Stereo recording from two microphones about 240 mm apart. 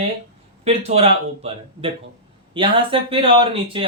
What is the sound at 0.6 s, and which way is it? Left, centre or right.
Speech, right.